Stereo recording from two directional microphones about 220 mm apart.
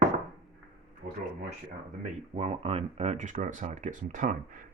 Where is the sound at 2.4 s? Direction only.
30° right (ahead or behind).